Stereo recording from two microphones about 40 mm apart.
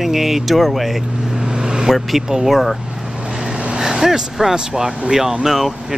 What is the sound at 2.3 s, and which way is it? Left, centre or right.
Speech, centre.